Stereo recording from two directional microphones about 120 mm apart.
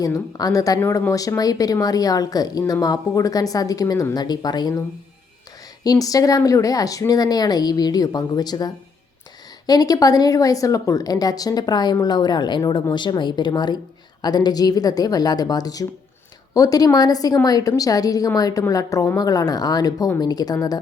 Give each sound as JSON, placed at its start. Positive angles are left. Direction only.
{"t": 0.0, "sound": "a woman's voice", "side_deg": 30}
{"t": 5.8, "sound": "a woman's voice", "side_deg": 30}